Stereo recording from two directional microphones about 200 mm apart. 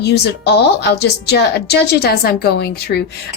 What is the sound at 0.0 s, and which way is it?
Speech, 55° left (ahead or behind).